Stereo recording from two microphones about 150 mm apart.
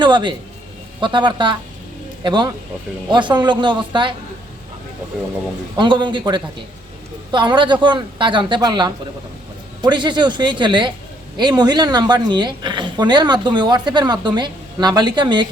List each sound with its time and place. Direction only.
0.0 s speech: 30° right (ahead or behind)
5.7 s a woman's voice: 30° right (ahead or behind)